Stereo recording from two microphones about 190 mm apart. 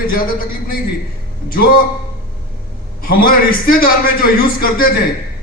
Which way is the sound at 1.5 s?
50° left (ahead or behind).